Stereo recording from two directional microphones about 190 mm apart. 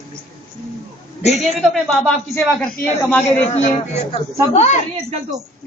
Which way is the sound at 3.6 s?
35° left (ahead or behind).